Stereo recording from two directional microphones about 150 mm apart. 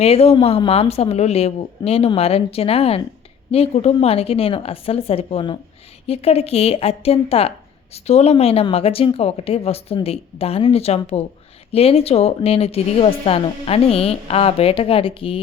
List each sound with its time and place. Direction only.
0.0 s a woman's voice: 40° left (ahead or behind)